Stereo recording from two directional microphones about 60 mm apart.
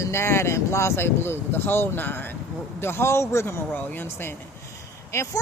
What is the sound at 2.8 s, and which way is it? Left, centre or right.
Speech, left.